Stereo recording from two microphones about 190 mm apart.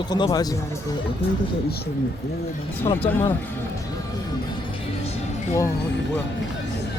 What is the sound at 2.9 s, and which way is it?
Speech, 20° left (ahead or behind).